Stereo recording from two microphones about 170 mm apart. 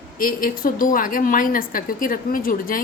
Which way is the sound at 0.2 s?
55° left (ahead or behind).